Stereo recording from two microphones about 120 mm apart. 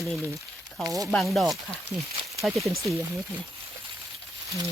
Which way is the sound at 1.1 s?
5° left (ahead or behind).